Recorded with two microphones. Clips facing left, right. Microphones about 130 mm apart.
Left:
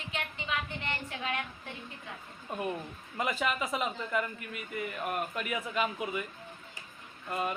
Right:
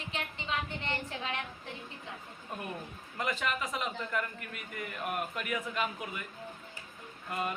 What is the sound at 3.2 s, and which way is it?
A man's voice, 10° left (ahead or behind).